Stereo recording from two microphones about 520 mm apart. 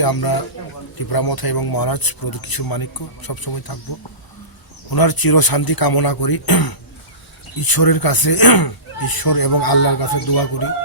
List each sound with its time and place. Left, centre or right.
0.0 s speech: left
4.9 s speech: left